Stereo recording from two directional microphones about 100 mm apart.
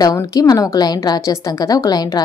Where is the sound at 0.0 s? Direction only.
40° left (ahead or behind).